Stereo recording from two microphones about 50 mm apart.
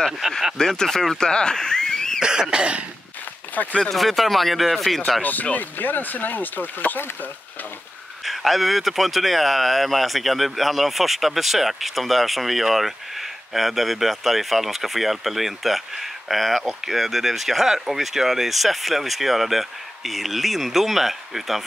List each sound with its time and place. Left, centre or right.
0.2 s speech: centre
0.6 s speech: centre
2.5 s cough: right
3.6 s speech: left
3.9 s speech: centre
5.2 s speech: left
8.3 s speech: centre